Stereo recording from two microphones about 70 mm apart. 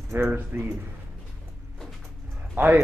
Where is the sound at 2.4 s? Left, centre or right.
Right.